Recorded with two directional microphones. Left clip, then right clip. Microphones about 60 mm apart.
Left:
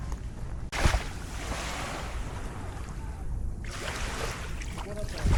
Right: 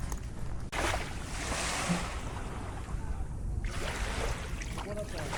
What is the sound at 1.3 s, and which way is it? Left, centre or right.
Waves, right.